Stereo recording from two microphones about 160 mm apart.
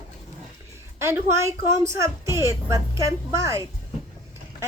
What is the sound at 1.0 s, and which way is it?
A woman's voice, 15° right (ahead or behind).